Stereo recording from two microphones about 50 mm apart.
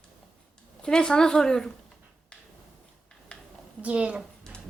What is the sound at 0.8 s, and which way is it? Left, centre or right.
Speech, centre.